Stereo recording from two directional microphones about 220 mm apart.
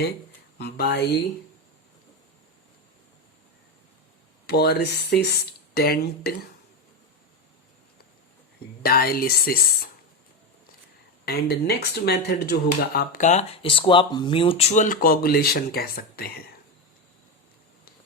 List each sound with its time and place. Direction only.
0.6 s speech: 45° left (ahead or behind)
4.4 s speech: 45° left (ahead or behind)
8.8 s speech: 40° left (ahead or behind)
11.3 s speech: 45° left (ahead or behind)